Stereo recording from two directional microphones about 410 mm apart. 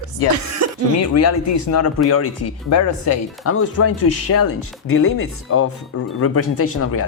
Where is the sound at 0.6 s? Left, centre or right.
Right.